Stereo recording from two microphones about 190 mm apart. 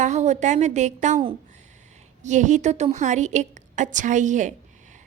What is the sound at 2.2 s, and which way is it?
A woman's voice, 40° right (ahead or behind).